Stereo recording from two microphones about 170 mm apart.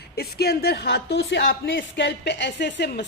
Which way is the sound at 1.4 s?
65° left (ahead or behind).